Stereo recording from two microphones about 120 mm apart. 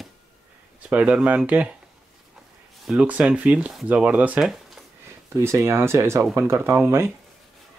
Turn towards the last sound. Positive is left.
turn(degrees=-20)  # may be behind; listen again after turning